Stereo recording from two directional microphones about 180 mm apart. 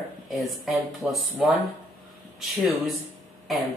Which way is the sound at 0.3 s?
Centre (ahead or behind).